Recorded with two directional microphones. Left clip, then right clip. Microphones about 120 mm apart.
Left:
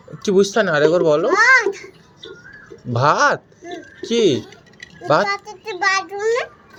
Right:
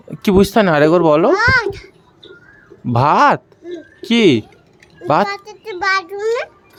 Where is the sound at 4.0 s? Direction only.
90° right.